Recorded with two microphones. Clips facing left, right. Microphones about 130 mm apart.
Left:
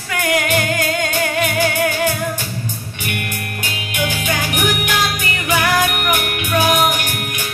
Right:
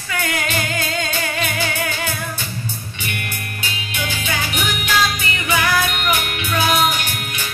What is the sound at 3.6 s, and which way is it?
Music, 45° left (ahead or behind).